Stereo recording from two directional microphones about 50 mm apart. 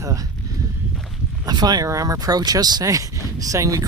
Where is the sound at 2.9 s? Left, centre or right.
Right.